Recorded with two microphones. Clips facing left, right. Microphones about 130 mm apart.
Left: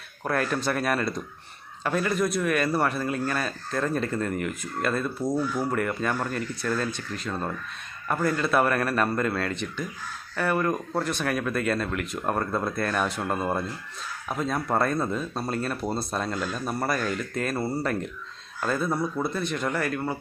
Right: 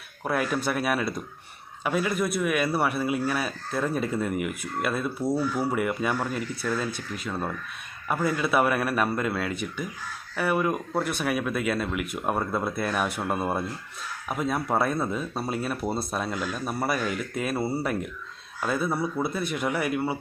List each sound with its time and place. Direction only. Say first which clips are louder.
0.3 s a man's voice: even; 5° right (ahead or behind)